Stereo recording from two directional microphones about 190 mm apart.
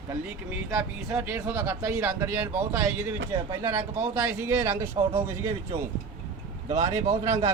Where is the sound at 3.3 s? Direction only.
25° right (ahead or behind).